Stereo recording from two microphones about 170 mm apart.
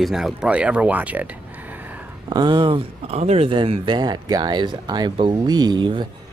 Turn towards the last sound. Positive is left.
turn(degrees=-25)  # may be behind; listen again after turning